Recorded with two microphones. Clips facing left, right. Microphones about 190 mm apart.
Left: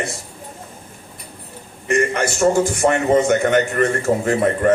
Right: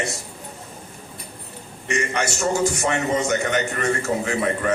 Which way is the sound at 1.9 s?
55° left (ahead or behind).